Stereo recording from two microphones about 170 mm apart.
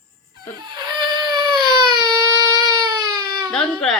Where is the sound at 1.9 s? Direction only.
25° right (ahead or behind).